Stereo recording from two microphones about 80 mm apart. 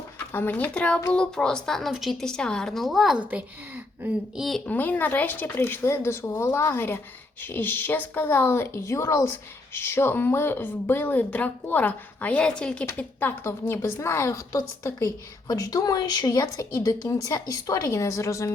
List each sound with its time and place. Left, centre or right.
0.3 s a woman's voice: left; by 3.2 s centre
3.2 s speech: right
4.4 s a woman's voice: centre
4.6 s a woman's voice: left
13.0 s a woman's voice: left
14.3 s a woman's voice: left